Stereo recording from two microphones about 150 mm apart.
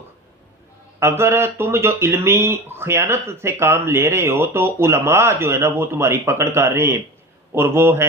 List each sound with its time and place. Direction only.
0.9 s speech: 15° right (ahead or behind)